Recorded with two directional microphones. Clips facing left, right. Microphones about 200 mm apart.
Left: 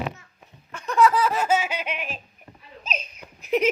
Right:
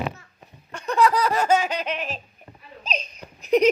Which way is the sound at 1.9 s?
35° right (ahead or behind).